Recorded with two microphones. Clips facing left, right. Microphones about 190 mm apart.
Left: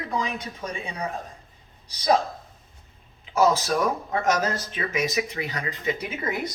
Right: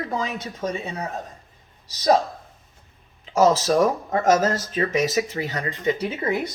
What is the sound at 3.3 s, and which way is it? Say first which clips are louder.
Speech: right 4 dB; 40° right (ahead or behind).